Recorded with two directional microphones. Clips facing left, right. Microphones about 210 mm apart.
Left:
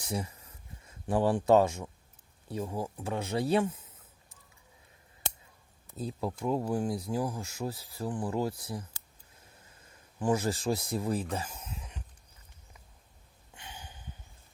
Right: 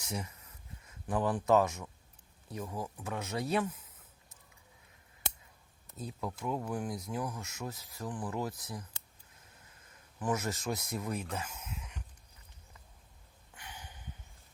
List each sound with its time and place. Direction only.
0.0 s a sound: 30° left (ahead or behind)
2.5 s speech: 30° left (ahead or behind)
6.0 s speech: 30° left (ahead or behind)
10.2 s speech: 30° left (ahead or behind)
13.5 s snort: 25° left (ahead or behind)